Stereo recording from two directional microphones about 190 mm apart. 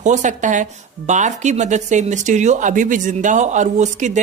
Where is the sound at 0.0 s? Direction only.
40° right (ahead or behind).